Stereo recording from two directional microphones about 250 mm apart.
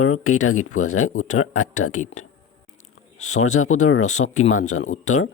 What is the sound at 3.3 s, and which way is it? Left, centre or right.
Speech, left.